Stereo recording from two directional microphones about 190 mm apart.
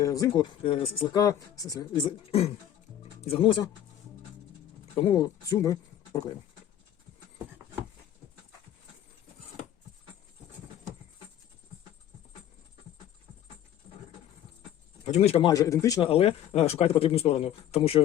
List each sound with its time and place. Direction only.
0.0 s speech: 20° left (ahead or behind)
4.9 s speech: 20° left (ahead or behind)
15.0 s speech: 35° left (ahead or behind)
15.4 s speech: 20° left (ahead or behind)
16.0 s speech: 30° left (ahead or behind)